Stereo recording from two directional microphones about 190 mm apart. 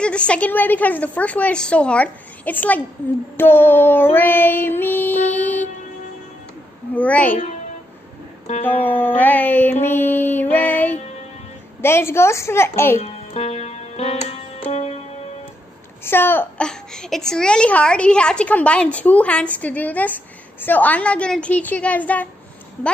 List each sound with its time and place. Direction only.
0.0 s a woman's voice: 5° left (ahead or behind)
3.3 s child singing: 10° left (ahead or behind)
6.9 s a woman's voice: 5° left (ahead or behind)
8.6 s music: 10° left (ahead or behind)
11.8 s a woman's voice: 15° left (ahead or behind)
13.0 s music: 35° left (ahead or behind)
16.0 s a woman's voice: 10° left (ahead or behind)